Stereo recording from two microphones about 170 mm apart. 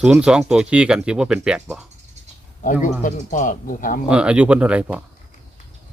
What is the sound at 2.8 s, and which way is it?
Speech, 50° left (ahead or behind).